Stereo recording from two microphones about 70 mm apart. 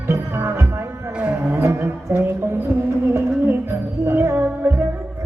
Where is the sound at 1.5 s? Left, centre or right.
Right.